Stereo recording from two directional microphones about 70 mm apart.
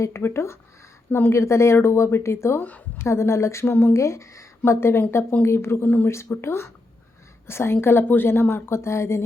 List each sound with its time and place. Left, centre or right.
0.0 s speech: left
2.6 s a woman's voice: left
3.0 s speech: left
6.1 s speech: left